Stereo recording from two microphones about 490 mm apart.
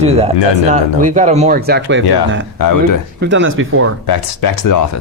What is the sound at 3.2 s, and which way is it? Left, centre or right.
Speech, right.